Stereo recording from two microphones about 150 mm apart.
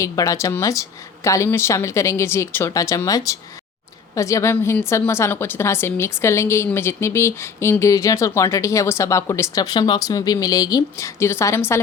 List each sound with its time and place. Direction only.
0.0 s a woman's voice: 20° left (ahead or behind)